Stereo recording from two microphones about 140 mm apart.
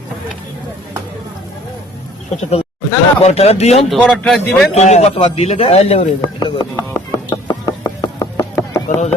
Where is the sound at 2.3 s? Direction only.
45° left (ahead or behind).